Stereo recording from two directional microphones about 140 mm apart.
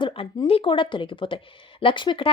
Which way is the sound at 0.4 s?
40° left (ahead or behind).